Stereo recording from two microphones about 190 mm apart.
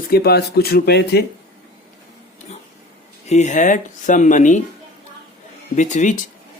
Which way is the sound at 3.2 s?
40° left (ahead or behind).